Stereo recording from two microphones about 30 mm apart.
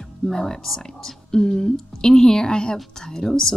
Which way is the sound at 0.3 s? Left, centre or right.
Centre.